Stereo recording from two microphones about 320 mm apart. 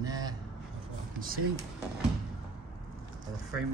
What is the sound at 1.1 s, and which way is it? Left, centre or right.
Speech, right.